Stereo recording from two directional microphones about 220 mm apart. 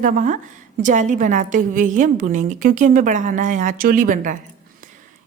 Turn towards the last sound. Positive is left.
turn(degrees=-35)  # may be behind; listen again after turning